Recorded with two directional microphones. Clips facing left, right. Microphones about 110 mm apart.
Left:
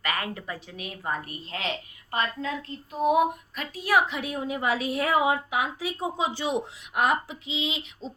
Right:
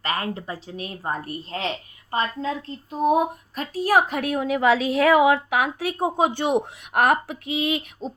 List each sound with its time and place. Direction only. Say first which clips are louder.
0.0 s a woman's voice: right 4 dB; 30° right (ahead or behind); by 8.1 s 55° right (ahead or behind)